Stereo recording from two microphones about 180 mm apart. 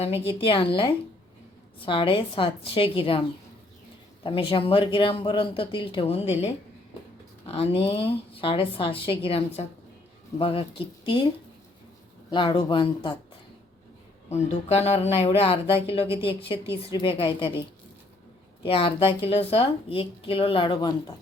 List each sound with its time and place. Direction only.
0.0 s speech: 30° left (ahead or behind)
12.3 s speech: 25° left (ahead or behind)
14.3 s speech: 35° left (ahead or behind)
18.6 s speech: 30° left (ahead or behind)